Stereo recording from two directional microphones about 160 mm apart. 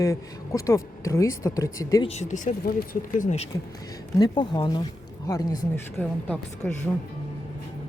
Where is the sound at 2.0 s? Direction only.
45° left (ahead or behind).